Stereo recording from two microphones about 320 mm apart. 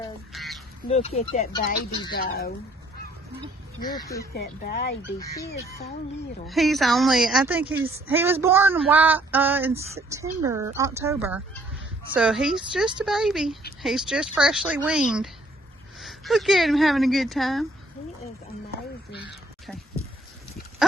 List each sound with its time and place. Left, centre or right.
0.3 s bird: centre
0.9 s speech: centre
3.9 s speech: centre
4.4 s speech: left
6.5 s a woman's voice: centre
19.6 s a sound: centre